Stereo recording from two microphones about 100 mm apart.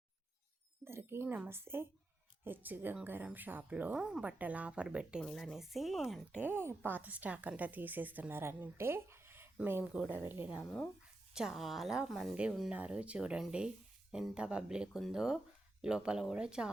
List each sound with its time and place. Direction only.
0.9 s a woman's voice: 25° right (ahead or behind)
3.9 s speech: 5° right (ahead or behind)
5.2 s a woman's voice: 5° left (ahead or behind)
6.4 s a woman's voice: 20° right (ahead or behind)
9.9 s speech: 15° right (ahead or behind)
10.6 s speech: 10° left (ahead or behind)
11.3 s a woman's voice: 5° right (ahead or behind)